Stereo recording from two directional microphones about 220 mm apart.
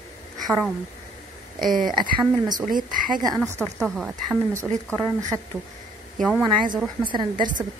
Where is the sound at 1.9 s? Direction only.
20° right (ahead or behind).